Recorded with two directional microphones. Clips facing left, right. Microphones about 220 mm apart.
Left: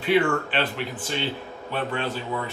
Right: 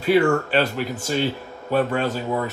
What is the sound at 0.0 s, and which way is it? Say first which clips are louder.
A man's voice: right 4 dB; 40° right (ahead or behind).